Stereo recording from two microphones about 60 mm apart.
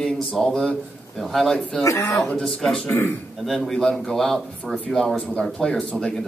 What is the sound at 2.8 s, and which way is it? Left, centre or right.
Speech, left.